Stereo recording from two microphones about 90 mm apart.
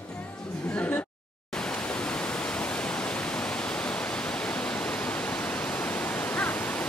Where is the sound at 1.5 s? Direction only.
10° left (ahead or behind).